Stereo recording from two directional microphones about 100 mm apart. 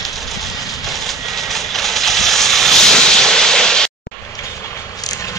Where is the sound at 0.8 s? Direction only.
Centre (ahead or behind).